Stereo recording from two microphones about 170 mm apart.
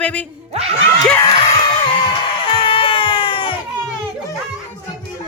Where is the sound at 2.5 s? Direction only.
30° left (ahead or behind).